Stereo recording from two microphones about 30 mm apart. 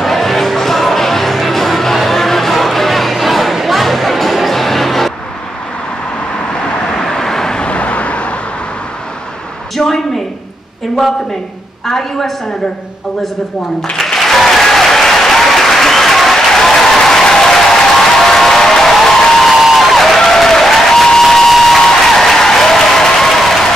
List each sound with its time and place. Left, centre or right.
0.0 s music: centre
2.0 s crowd: centre
3.5 s music: centre
7.0 s vehicle: centre
7.5 s vehicle: left
9.8 s a sound: left
11.8 s a woman's voice: centre
13.9 s applause: centre
18.9 s music: centre
19.7 s a sound: centre
20.2 s applause: centre
21.2 s a sound: centre
21.7 s applause: centre